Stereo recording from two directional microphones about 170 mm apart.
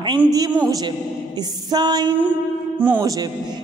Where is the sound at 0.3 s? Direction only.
20° right (ahead or behind).